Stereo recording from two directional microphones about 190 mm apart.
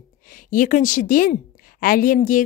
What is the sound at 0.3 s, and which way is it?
A woman's voice, 45° left (ahead or behind).